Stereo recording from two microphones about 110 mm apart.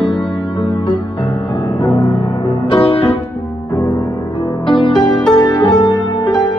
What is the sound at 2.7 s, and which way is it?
Music, 55° left (ahead or behind).